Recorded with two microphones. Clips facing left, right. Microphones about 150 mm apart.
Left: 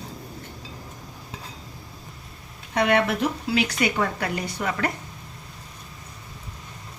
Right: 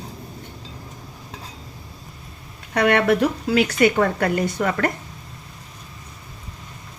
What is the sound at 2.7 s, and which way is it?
A woman's voice, 60° right (ahead or behind).